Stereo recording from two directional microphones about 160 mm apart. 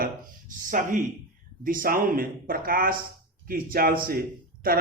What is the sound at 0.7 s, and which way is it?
A man's voice, 55° right (ahead or behind).